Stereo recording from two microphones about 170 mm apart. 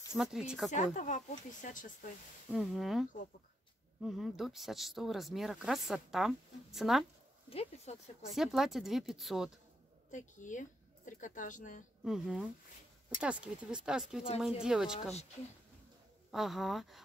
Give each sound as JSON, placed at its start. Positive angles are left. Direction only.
{"t": 0.1, "sound": "speech", "side_deg": -5}
{"t": 0.7, "sound": "speech", "side_deg": 45}
{"t": 2.5, "sound": "speech", "side_deg": 0}
{"t": 7.4, "sound": "speech", "side_deg": 35}
{"t": 8.4, "sound": "speech", "side_deg": 0}
{"t": 10.1, "sound": "speech", "side_deg": 50}
{"t": 12.0, "sound": "speech", "side_deg": -5}
{"t": 16.3, "sound": "speech", "side_deg": 0}